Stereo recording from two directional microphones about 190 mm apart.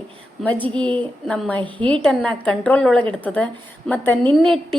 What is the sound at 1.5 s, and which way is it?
Speech, 25° right (ahead or behind).